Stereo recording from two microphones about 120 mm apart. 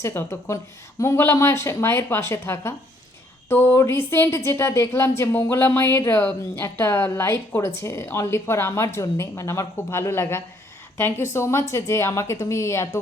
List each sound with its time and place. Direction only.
0.0 s a woman's voice: 20° left (ahead or behind)